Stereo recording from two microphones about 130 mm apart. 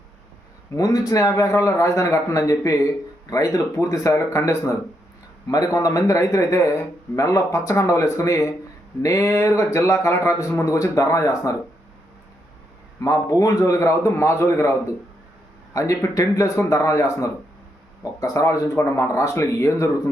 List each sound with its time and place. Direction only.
0.8 s a man's voice: 25° left (ahead or behind)
13.0 s a man's voice: 25° left (ahead or behind)